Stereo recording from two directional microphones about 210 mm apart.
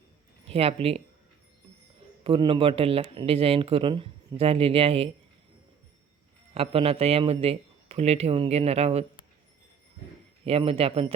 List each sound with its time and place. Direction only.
0.5 s speech: 30° right (ahead or behind)
2.2 s speech: 25° right (ahead or behind)
6.5 s speech: 30° right (ahead or behind)
10.4 s speech: 25° right (ahead or behind)